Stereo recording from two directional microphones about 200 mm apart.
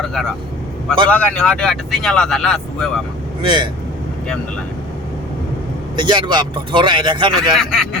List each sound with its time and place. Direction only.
0.0 s speech: centre (ahead or behind)
3.4 s speech: 25° right (ahead or behind)
6.0 s speech: 25° right (ahead or behind)
7.5 s speech: centre (ahead or behind)